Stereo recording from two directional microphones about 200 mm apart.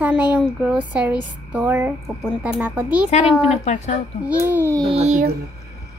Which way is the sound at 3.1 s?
30° left (ahead or behind).